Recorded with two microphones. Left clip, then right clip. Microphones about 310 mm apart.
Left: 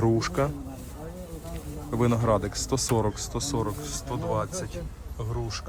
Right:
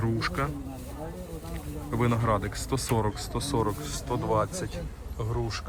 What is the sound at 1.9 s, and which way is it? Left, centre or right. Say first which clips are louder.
Speech: left 2 dB; centre.